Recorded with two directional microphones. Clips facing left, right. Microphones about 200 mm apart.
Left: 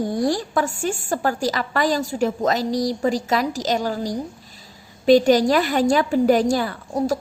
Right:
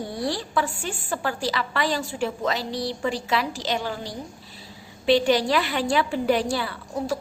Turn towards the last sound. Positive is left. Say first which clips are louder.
# left 5 dB
turn(degrees=45)  # may be behind; listen again after turning